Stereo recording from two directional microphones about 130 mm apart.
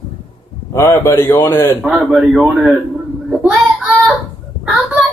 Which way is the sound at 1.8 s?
5° right (ahead or behind).